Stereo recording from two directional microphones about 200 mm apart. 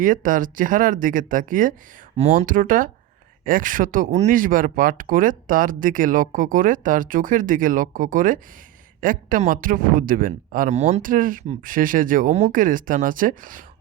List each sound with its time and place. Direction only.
0.0 s speech: 40° right (ahead or behind)